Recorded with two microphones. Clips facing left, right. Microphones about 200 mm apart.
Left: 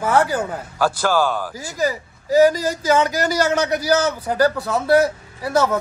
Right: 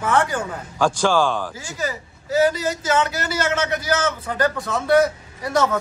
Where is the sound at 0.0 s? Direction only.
35° left (ahead or behind).